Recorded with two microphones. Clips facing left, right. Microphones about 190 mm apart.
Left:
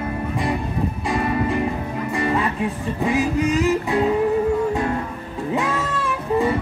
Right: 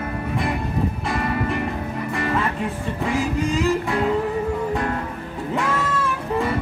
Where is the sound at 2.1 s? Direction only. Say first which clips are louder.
Left 2 dB; 15° left (ahead or behind).